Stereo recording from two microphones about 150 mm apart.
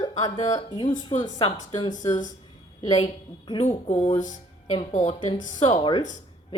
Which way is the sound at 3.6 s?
50° left (ahead or behind).